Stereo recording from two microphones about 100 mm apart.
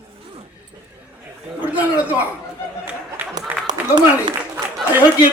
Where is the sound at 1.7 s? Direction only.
15° right (ahead or behind).